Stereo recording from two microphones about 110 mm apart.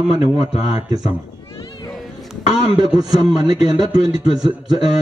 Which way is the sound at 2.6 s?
40° right (ahead or behind).